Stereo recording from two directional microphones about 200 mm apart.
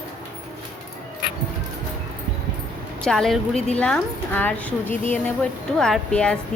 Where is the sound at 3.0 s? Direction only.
Centre (ahead or behind).